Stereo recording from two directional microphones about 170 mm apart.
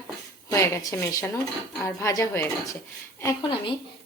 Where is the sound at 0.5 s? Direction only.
15° left (ahead or behind).